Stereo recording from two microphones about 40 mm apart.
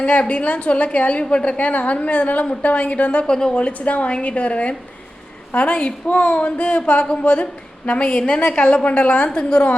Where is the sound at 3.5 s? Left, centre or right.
Left.